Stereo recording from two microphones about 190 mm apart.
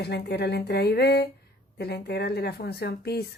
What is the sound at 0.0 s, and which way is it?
Speech, 60° left (ahead or behind).